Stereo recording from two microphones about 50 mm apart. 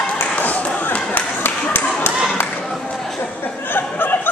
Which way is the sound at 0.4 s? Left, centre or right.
Left.